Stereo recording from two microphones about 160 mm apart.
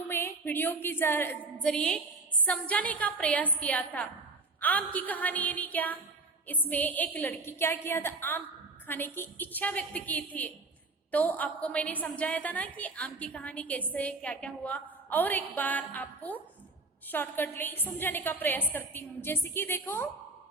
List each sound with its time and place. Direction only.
0.1 s a woman's voice: 15° left (ahead or behind)